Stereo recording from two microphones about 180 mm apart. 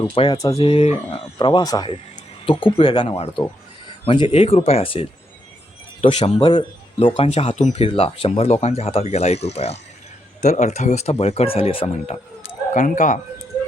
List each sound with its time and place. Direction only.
0.1 s speech: 25° left (ahead or behind)
12.7 s speech: 45° left (ahead or behind)